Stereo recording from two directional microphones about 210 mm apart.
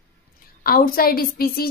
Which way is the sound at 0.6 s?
45° left (ahead or behind).